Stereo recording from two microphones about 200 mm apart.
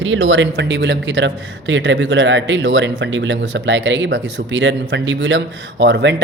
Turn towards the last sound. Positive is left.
turn(degrees=-60)  # may be behind; listen again after turning